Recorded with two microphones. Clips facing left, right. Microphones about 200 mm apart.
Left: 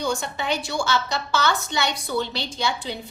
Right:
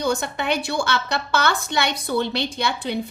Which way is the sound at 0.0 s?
60° right (ahead or behind).